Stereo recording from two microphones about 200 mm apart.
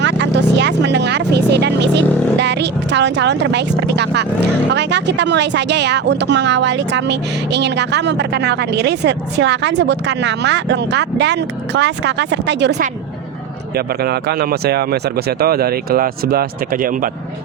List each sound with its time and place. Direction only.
0.0 s speech: 60° right (ahead or behind)
13.7 s speech: 50° right (ahead or behind)